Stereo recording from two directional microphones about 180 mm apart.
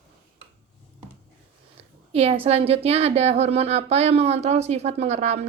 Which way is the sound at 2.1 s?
35° right (ahead or behind).